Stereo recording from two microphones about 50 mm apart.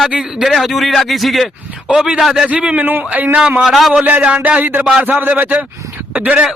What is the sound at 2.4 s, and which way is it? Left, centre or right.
Speech, right.